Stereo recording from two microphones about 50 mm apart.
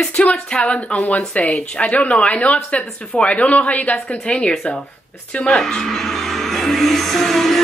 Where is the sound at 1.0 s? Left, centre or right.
Left.